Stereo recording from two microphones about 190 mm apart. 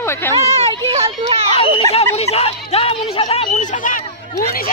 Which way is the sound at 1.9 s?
35° left (ahead or behind).